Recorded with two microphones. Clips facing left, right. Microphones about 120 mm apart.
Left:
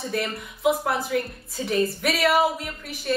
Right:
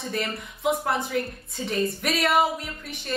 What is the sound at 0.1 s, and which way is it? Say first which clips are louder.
A woman's voice: left 1 dB; 5° left (ahead or behind).